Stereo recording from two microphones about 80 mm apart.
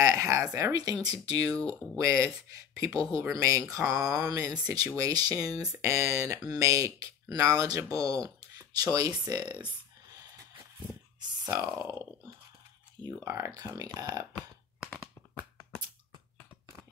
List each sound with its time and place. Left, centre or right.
0.0 s a sound: right
0.7 s speech: right
5.8 s speech: right
11.4 s speech: right
13.0 s speech: right
13.7 s speech: right